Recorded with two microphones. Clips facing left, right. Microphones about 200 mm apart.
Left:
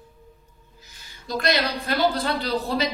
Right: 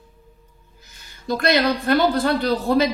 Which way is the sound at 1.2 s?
55° right (ahead or behind).